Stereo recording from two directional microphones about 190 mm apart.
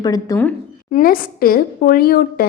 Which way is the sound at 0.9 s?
45° left (ahead or behind).